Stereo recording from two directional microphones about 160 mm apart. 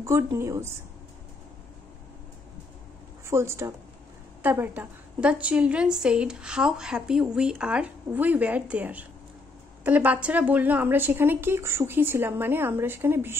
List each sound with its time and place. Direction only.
0.0 s a woman's voice: 15° right (ahead or behind)
3.3 s a woman's voice: 15° right (ahead or behind)